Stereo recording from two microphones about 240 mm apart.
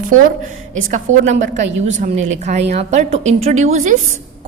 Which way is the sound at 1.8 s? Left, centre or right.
Right.